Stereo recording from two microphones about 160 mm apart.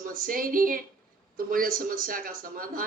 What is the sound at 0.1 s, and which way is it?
Speech, 60° right (ahead or behind).